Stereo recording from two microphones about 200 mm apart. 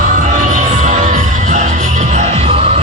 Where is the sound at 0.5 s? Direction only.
40° right (ahead or behind).